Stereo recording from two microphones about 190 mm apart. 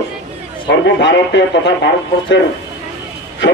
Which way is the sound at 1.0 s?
70° left (ahead or behind).